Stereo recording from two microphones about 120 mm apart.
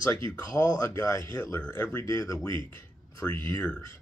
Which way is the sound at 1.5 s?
15° left (ahead or behind).